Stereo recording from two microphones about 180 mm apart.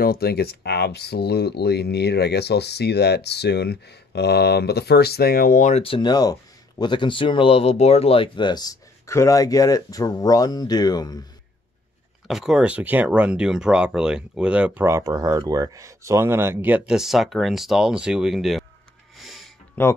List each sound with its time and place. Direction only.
0.0 s speech: 60° left (ahead or behind); by 11.2 s 20° left (ahead or behind)
12.3 s speech: 5° right (ahead or behind)
19.1 s a sound: centre (ahead or behind)
19.8 s speech: 10° left (ahead or behind)